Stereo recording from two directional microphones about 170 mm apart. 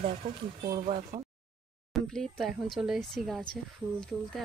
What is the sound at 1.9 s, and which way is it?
Speech, centre (ahead or behind).